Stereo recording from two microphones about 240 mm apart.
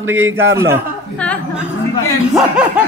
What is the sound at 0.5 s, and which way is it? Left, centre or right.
Speech, centre.